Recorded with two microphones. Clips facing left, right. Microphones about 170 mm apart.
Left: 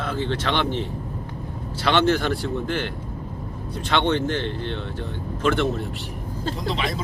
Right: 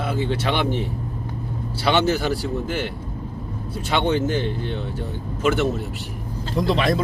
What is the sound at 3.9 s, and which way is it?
Speech, 10° right (ahead or behind).